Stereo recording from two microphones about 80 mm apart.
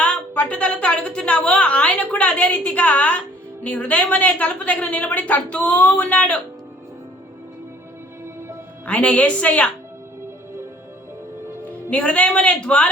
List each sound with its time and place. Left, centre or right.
0.0 s a woman's voice: centre
8.9 s a woman's voice: centre
11.9 s a woman's voice: centre